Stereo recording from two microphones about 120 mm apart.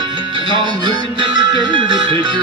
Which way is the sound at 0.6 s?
40° right (ahead or behind).